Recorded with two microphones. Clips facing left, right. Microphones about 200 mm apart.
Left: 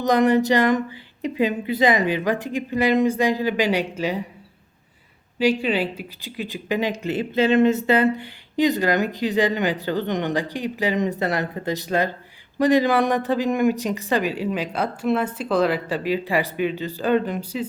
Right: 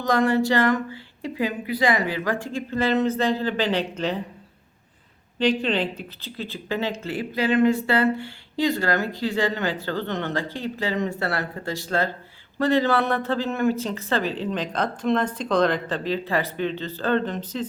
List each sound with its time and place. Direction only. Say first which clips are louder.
0.0 s speech: left 3 dB; 20° left (ahead or behind)
5.4 s speech: left 2 dB; 10° left (ahead or behind)